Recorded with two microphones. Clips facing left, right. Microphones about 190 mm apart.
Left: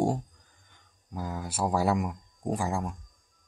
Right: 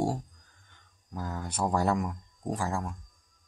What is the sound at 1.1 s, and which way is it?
Speech, 10° left (ahead or behind).